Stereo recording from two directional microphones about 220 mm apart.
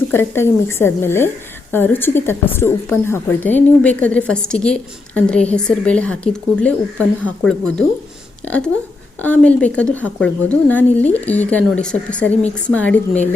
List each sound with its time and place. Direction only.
0.1 s a woman's voice: 10° left (ahead or behind)